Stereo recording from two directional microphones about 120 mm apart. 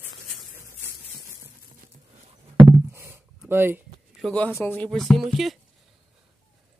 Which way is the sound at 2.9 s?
20° right (ahead or behind).